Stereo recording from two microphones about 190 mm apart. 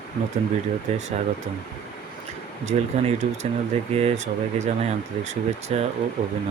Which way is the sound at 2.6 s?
35° right (ahead or behind).